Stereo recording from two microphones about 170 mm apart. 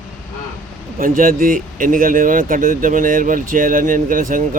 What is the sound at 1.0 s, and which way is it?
Speech, 55° right (ahead or behind).